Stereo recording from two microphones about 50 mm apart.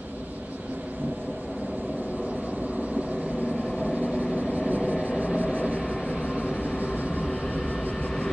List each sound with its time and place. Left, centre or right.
3.9 s vehicle: right
4.4 s vehicle: right
5.4 s vehicle: left